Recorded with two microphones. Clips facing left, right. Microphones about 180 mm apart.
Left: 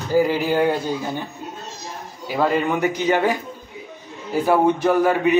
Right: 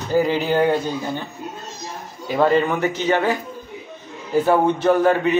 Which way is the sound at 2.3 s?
10° left (ahead or behind).